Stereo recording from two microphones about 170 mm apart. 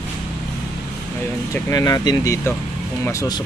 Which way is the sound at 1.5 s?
20° left (ahead or behind).